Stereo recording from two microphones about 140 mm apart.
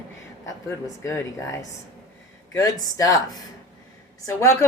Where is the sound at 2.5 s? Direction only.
25° left (ahead or behind).